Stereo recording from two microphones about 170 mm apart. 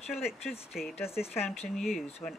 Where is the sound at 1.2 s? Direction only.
35° left (ahead or behind).